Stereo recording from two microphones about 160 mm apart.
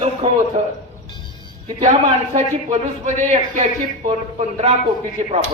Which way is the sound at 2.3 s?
40° right (ahead or behind).